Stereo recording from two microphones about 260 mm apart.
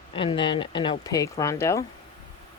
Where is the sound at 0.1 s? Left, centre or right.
Centre.